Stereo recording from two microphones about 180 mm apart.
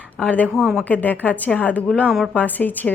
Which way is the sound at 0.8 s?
10° left (ahead or behind).